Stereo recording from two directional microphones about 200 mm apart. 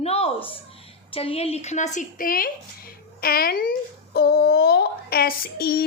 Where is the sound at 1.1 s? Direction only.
30° left (ahead or behind).